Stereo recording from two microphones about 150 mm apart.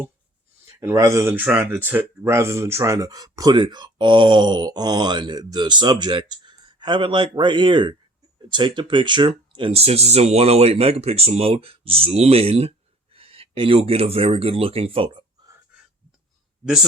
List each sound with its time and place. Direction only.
0.7 s speech: 20° right (ahead or behind); by 15.2 s 35° right (ahead or behind)